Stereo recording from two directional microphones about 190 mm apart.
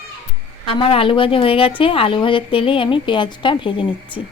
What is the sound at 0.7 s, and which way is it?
A woman's voice, 30° left (ahead or behind).